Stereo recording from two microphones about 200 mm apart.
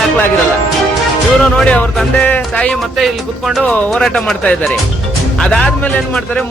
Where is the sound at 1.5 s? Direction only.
5° left (ahead or behind).